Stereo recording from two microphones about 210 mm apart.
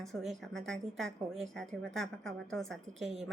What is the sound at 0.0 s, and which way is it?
A woman's voice, centre (ahead or behind).